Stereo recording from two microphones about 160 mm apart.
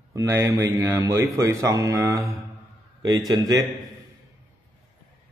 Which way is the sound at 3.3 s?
25° right (ahead or behind).